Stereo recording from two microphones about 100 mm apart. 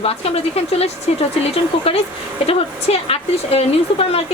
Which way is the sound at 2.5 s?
85° left.